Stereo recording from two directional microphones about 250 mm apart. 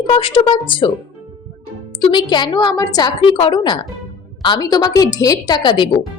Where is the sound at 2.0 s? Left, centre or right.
Centre.